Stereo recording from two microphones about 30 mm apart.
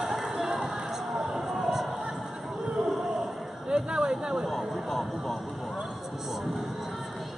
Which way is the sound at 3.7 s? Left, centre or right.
Right.